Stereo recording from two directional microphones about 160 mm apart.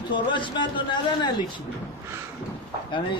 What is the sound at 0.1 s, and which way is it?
A man's voice, 30° left (ahead or behind).